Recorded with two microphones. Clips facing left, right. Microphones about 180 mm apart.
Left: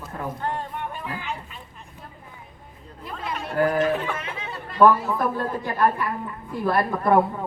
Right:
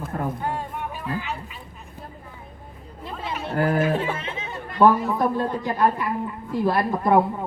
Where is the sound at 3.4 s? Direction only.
25° right (ahead or behind).